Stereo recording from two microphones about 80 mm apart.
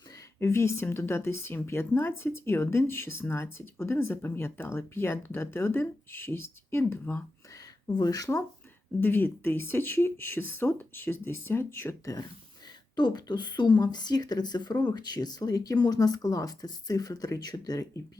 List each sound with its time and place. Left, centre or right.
0.3 s speech: left
7.9 s speech: left
9.0 s speech: left
13.0 s speech: left